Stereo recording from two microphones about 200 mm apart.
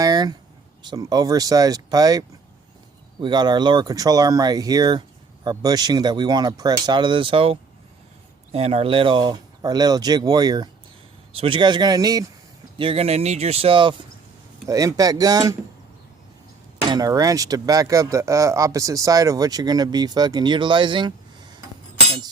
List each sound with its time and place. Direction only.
0.0 s a sound: 20° right (ahead or behind)
0.8 s speech: 20° right (ahead or behind)
12.8 s speech: 30° right (ahead or behind)
16.9 s speech: 20° right (ahead or behind)